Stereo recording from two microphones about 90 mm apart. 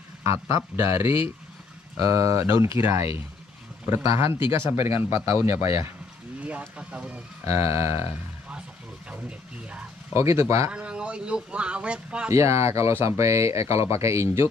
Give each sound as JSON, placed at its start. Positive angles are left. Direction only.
{"t": 0.2, "sound": "speech", "side_deg": -35}
{"t": 6.8, "sound": "speech", "side_deg": -15}
{"t": 7.4, "sound": "speech", "side_deg": -30}
{"t": 10.1, "sound": "speech", "side_deg": -35}
{"t": 10.7, "sound": "speech", "side_deg": -10}
{"t": 12.3, "sound": "speech", "side_deg": -35}